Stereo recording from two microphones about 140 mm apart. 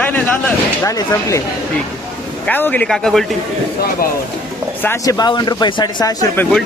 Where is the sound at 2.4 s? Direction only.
10° left (ahead or behind).